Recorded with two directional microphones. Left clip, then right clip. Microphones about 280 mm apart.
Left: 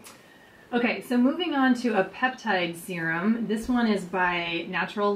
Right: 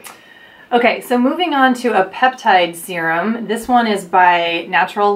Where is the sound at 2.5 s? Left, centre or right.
Centre.